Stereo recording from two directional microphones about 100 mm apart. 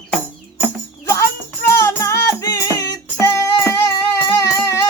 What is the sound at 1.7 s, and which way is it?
Music, 30° left (ahead or behind).